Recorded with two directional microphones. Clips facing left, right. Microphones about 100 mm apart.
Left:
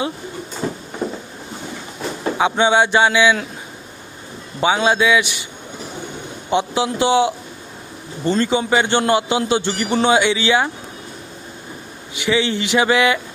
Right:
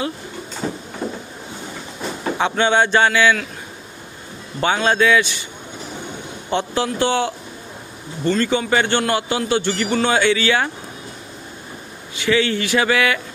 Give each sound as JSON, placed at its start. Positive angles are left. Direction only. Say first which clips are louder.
{"t": 2.4, "sound": "speech", "louder": "left 2 dB", "side_deg": 15}
{"t": 4.6, "sound": "speech", "louder": "left 1 dB", "side_deg": 10}
{"t": 6.5, "sound": "a man's voice", "louder": "left 2 dB", "side_deg": 15}
{"t": 12.1, "sound": "a man's voice", "louder": "even", "side_deg": 20}